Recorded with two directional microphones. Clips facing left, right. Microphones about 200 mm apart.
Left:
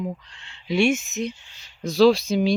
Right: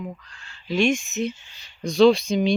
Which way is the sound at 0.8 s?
5° left (ahead or behind).